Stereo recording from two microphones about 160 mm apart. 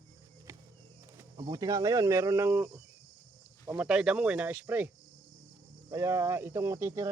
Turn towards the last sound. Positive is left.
turn(degrees=-15)  # may be behind; listen again after turning